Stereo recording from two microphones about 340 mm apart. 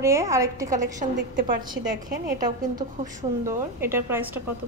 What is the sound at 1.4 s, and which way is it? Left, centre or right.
Speech, right.